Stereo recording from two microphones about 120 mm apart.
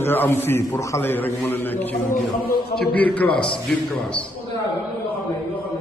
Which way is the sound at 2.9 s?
10° left (ahead or behind).